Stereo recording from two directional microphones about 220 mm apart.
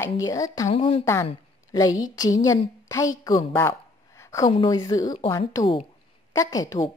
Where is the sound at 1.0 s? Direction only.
15° left (ahead or behind).